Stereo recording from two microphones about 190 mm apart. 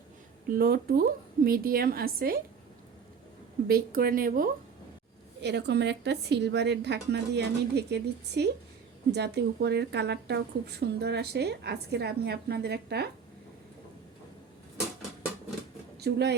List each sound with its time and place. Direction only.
0.5 s a woman's voice: 50° right (ahead or behind)
3.7 s a woman's voice: 50° right (ahead or behind)
5.4 s speech: 65° right (ahead or behind)
16.0 s speech: 60° right (ahead or behind)